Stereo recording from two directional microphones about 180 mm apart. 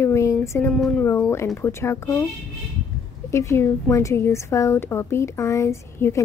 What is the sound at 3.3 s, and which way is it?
A woman's voice, 15° left (ahead or behind).